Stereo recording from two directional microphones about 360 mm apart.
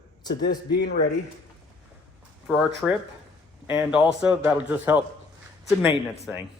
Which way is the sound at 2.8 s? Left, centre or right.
Centre.